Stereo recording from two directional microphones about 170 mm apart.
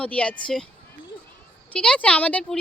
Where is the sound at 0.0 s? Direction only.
5° left (ahead or behind).